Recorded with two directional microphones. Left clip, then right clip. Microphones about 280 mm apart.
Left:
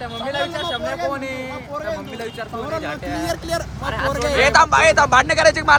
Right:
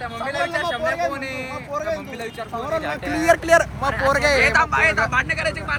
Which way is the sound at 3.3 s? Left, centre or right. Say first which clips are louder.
Right 13 dB; right.